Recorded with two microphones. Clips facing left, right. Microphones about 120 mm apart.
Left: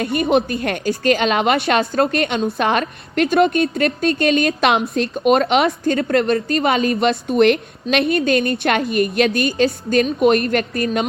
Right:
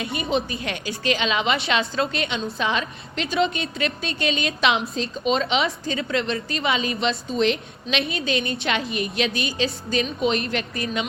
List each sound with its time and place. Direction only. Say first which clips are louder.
0.0 s a woman's voice: left 8 dB; 60° left (ahead or behind)